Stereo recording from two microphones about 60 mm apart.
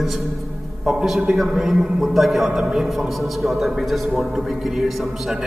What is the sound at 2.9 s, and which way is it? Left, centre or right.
A man's voice, centre.